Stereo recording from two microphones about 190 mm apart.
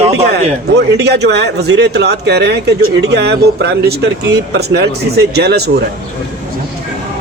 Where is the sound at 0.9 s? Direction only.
60° right (ahead or behind).